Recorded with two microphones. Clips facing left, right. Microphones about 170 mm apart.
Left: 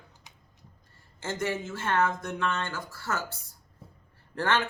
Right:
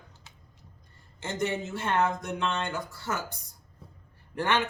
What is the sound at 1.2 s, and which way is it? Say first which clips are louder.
A man's voice: right 1 dB; 20° right (ahead or behind).